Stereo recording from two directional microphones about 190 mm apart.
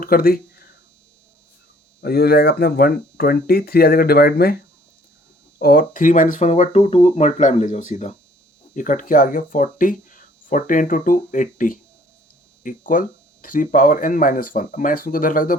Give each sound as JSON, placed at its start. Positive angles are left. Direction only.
{"t": 0.0, "sound": "a sound", "side_deg": 50}
{"t": 2.0, "sound": "speech", "side_deg": 55}
{"t": 5.5, "sound": "speech", "side_deg": 50}